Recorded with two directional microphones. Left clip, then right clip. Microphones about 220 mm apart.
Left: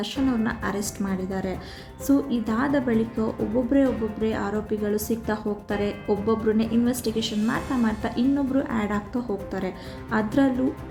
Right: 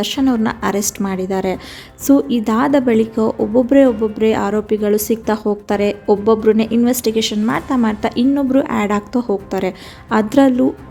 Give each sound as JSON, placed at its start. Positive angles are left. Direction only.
{"t": 0.0, "sound": "a woman's voice", "side_deg": -30}